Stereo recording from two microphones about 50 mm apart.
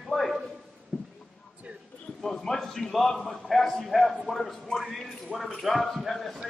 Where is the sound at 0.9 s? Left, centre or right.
Centre.